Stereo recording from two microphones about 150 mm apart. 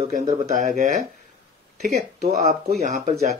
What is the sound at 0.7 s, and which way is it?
Speech, 55° right (ahead or behind).